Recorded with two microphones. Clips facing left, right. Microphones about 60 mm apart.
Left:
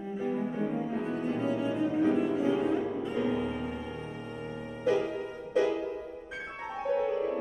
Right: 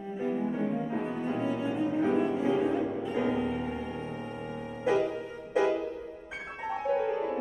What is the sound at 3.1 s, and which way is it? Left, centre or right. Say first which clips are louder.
Music: right 2 dB; centre.